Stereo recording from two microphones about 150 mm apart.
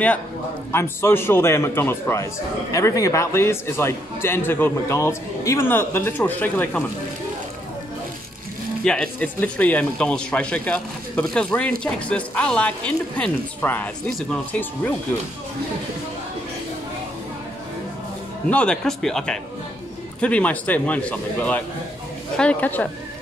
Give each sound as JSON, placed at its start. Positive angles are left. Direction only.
{"t": 0.7, "sound": "a man's voice", "side_deg": 15}
{"t": 8.8, "sound": "a man's voice", "side_deg": 5}
{"t": 18.5, "sound": "a man's voice", "side_deg": 5}